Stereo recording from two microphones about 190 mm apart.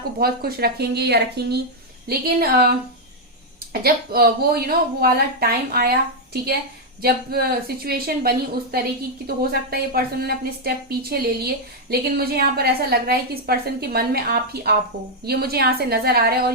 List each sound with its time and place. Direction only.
0.2 s a woman's voice: 55° right (ahead or behind)